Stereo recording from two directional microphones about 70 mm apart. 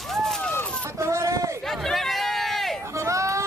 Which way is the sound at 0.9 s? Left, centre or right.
Right.